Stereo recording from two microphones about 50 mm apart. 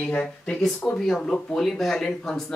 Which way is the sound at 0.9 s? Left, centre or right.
Centre.